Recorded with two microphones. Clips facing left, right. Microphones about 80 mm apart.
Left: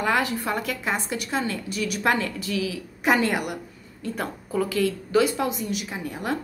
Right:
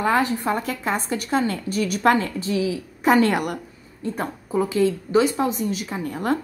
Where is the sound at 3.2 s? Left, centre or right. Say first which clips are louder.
Right 5 dB; right.